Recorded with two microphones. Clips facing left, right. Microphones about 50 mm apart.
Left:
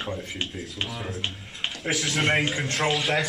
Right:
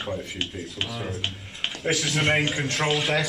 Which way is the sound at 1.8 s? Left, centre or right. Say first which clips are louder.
Right 1 dB; centre.